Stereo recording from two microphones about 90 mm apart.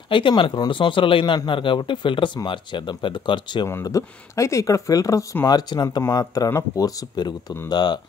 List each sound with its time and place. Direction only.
0.1 s a man's voice: 70° left (ahead or behind)
3.8 s speech: 35° left (ahead or behind)
5.5 s speech: 50° left (ahead or behind)